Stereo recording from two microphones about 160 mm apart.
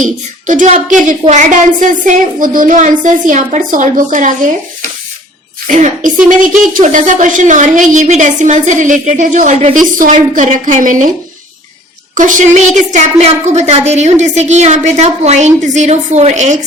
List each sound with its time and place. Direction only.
0.0 s a woman's voice: 55° right (ahead or behind)
5.6 s a woman's voice: 55° right (ahead or behind)
12.1 s a woman's voice: 50° right (ahead or behind)